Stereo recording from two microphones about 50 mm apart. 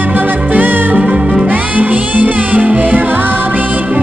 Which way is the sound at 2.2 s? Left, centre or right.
Right.